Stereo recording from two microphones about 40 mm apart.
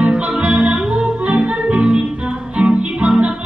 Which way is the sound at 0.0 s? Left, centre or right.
Right.